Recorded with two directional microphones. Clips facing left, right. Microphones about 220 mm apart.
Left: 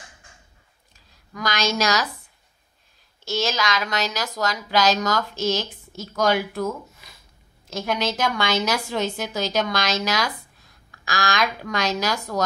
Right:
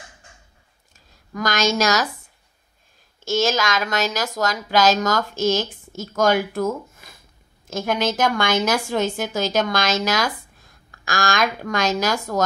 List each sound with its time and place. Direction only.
1.3 s a woman's voice: 45° right (ahead or behind)
3.3 s a woman's voice: 50° right (ahead or behind)